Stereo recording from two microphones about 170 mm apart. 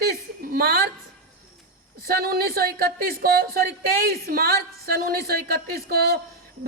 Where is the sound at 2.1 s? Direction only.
65° right (ahead or behind).